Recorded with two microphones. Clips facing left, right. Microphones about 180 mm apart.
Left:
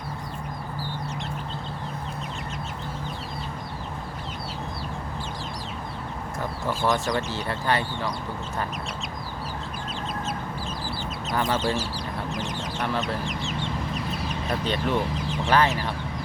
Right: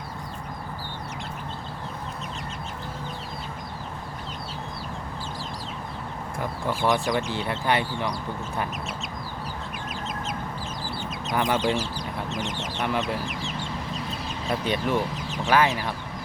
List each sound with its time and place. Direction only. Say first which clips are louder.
6.7 s speech: right 1 dB; 15° right (ahead or behind)
11.3 s speech: right 1 dB; 15° right (ahead or behind)
14.7 s speech: even; 10° right (ahead or behind)